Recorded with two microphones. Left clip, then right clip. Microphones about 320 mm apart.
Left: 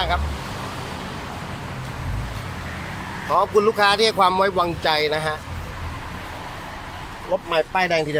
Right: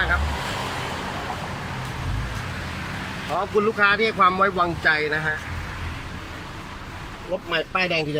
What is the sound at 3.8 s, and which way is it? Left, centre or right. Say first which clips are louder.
Speech: left 2 dB; centre.